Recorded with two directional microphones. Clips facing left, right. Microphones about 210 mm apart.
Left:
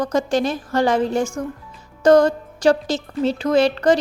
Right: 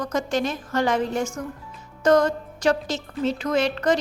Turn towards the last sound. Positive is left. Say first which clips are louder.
# left 6 dB
turn(degrees=30)  # may be behind; listen again after turning